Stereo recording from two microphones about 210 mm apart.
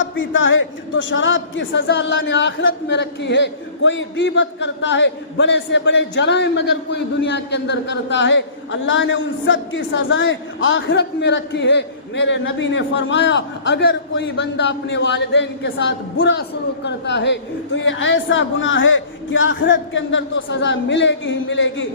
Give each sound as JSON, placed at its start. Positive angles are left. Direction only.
{"t": 0.2, "sound": "a man's voice", "side_deg": 65}